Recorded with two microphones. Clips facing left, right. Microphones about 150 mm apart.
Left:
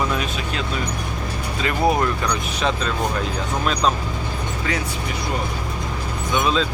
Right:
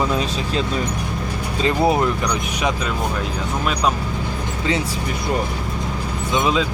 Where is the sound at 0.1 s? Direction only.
30° right (ahead or behind).